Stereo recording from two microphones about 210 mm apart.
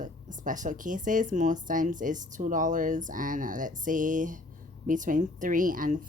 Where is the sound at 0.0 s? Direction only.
35° right (ahead or behind).